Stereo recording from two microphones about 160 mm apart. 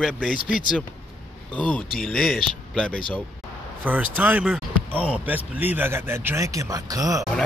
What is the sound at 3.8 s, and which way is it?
Speech, 10° right (ahead or behind).